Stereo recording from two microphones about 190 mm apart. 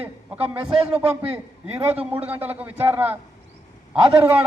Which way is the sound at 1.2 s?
30° right (ahead or behind).